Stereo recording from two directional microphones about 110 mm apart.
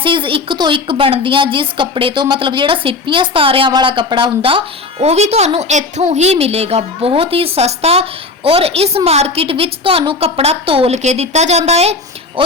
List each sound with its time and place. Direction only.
0.0 s a woman's voice: 50° right (ahead or behind); by 11.9 s 75° right (ahead or behind)